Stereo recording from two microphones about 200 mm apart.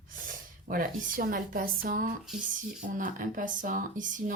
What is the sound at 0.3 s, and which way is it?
Speech, 45° right (ahead or behind).